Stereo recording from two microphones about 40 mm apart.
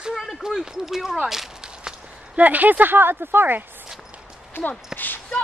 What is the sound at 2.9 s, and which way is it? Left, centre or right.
Speech, right.